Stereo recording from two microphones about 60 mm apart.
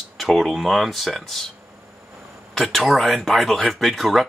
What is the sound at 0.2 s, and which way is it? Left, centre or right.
Speech, centre.